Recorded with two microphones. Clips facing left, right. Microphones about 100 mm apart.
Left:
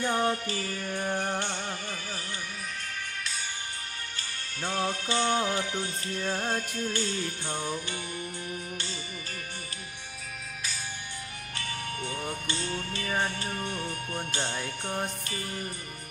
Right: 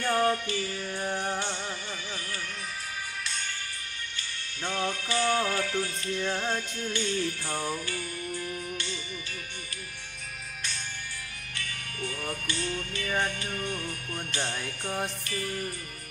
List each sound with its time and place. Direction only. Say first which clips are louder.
0.0 s music: right 2 dB; 20° left (ahead or behind)
0.4 s music: right 1 dB; 40° left (ahead or behind)
0.9 s music: left 2 dB; 15° left (ahead or behind)
1.3 s music: even; 55° left (ahead or behind)
4.6 s music: left 1 dB; 35° left (ahead or behind)
6.4 s music: left 1 dB; 40° left (ahead or behind)
7.4 s music: right 1 dB; 25° left (ahead or behind)
11.5 s music: left 5 dB; 30° left (ahead or behind)